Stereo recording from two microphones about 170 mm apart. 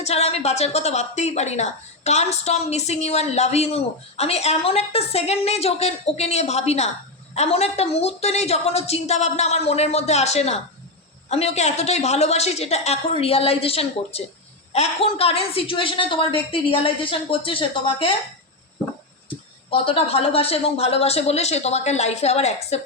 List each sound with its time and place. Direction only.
0.0 s a woman's voice: 40° left (ahead or behind)
19.7 s a woman's voice: 30° left (ahead or behind)